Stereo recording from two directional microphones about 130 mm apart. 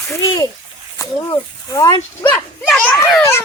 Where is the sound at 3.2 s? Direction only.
20° left (ahead or behind).